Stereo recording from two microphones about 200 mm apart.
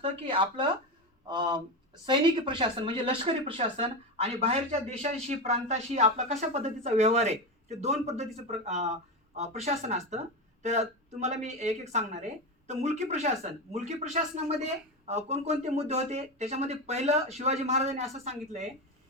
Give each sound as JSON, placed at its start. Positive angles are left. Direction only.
{"t": 0.0, "sound": "a woman's voice", "side_deg": -25}